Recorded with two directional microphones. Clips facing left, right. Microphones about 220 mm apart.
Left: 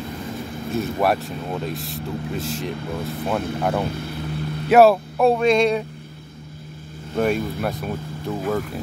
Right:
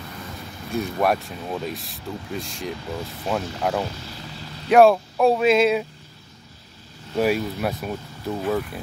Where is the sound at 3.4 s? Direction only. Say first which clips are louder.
Left 2 dB; 55° left (ahead or behind).